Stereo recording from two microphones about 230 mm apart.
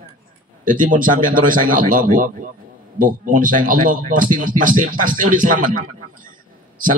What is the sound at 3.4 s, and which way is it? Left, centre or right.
A man's voice, right.